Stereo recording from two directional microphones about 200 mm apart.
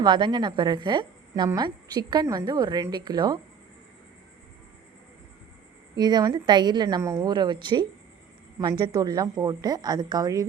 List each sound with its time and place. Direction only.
0.0 s speech: 20° right (ahead or behind)
6.0 s speech: 20° right (ahead or behind)